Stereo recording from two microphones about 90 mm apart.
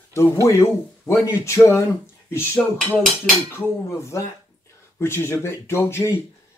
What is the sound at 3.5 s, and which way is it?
Speech, 30° left (ahead or behind).